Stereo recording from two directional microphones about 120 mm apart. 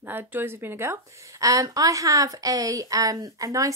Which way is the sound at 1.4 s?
30° right (ahead or behind).